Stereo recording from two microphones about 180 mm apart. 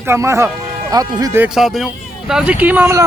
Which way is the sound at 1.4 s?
5° right (ahead or behind).